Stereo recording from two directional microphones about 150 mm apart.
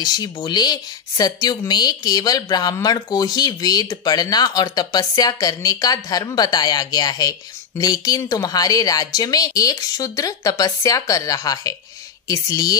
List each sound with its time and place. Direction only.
0.0 s speech: 25° left (ahead or behind)